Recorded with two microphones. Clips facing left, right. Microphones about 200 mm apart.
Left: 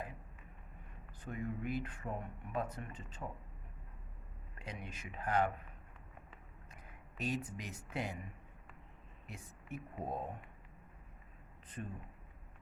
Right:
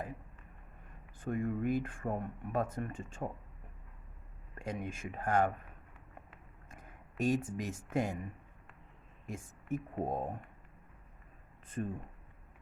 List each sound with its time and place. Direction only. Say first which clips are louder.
1.2 s speech: right 7 dB; 50° right (ahead or behind)
4.5 s speech: right 8 dB; 50° right (ahead or behind)
6.7 s speech: right 4 dB; 50° right (ahead or behind)
9.2 s a woman's voice: right 8 dB; 45° right (ahead or behind)
11.8 s speech: right 8 dB; 40° right (ahead or behind)